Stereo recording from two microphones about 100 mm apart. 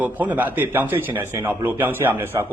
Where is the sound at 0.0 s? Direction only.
15° right (ahead or behind).